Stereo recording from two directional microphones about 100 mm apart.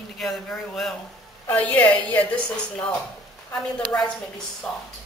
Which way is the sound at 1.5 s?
15° left (ahead or behind).